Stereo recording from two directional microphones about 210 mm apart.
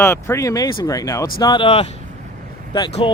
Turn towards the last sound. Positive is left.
turn(degrees=20)  # may be behind; listen again after turning